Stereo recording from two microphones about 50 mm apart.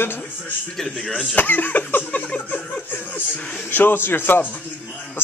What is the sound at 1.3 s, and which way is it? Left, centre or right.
Cough, left.